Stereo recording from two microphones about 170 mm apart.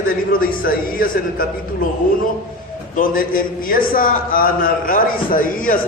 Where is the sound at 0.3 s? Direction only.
55° left (ahead or behind).